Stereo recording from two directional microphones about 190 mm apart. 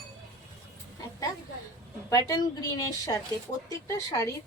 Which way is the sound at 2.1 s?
15° left (ahead or behind).